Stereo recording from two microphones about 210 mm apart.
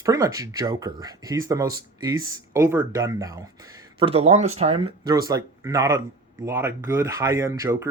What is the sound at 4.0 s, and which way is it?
Speech, 25° right (ahead or behind).